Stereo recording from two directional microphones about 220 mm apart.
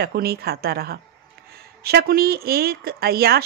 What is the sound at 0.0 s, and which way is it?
Speech, 45° right (ahead or behind).